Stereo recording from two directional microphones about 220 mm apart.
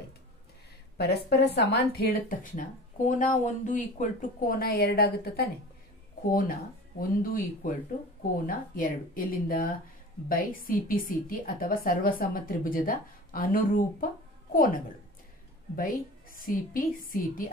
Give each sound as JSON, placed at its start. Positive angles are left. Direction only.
{"t": 0.9, "sound": "a woman's voice", "side_deg": 45}
{"t": 7.0, "sound": "a woman's voice", "side_deg": 40}